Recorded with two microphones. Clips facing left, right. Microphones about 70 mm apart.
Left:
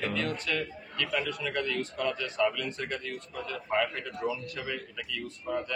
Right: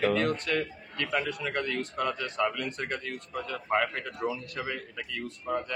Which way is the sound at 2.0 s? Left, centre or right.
Right.